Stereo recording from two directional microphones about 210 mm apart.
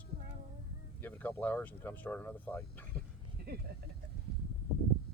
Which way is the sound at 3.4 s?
50° right (ahead or behind).